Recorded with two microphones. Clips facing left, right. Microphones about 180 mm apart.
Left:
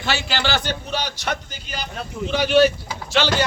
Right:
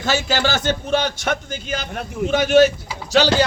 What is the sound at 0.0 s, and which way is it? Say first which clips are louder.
A man's voice: right 4 dB; 45° right (ahead or behind).